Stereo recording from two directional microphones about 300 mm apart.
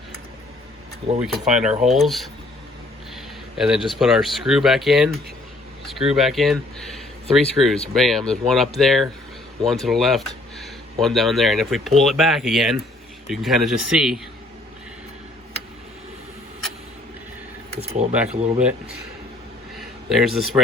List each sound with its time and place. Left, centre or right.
1.2 s speech: centre
3.6 s speech: centre
17.7 s camera: right
18.1 s speech: centre
19.7 s a sound: centre